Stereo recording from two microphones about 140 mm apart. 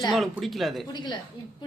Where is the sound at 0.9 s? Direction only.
30° left (ahead or behind).